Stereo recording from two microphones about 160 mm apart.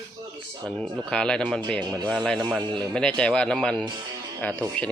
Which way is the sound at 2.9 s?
5° left (ahead or behind).